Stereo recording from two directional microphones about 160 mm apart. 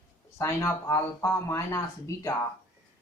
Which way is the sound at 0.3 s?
15° left (ahead or behind).